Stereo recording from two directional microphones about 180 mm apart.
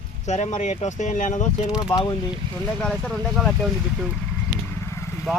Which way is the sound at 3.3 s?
Centre (ahead or behind).